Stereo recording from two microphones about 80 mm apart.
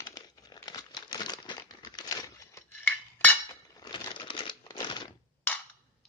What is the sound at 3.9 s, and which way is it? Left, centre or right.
Crumpling, left.